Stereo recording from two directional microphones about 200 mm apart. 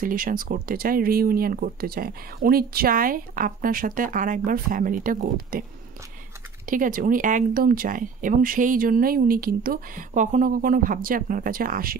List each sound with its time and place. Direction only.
0.0 s speech: 45° right (ahead or behind)
6.6 s speech: 45° right (ahead or behind)